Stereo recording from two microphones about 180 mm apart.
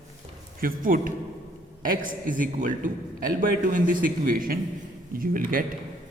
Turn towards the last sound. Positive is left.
turn(degrees=-50)  # may be behind; listen again after turning